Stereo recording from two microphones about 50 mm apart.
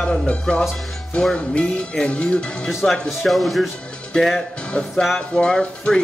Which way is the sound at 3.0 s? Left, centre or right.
Centre.